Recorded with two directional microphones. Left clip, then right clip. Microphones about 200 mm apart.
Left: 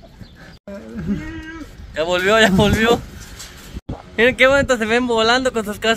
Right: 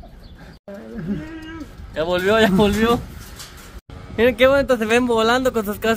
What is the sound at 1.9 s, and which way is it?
Speech, 10° left (ahead or behind).